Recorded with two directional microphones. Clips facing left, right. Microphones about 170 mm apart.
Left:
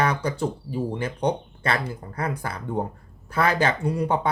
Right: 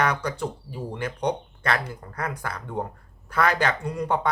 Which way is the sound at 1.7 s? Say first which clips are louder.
Left 1 dB; 30° left (ahead or behind).